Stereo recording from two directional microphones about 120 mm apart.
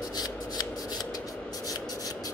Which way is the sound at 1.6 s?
30° left (ahead or behind).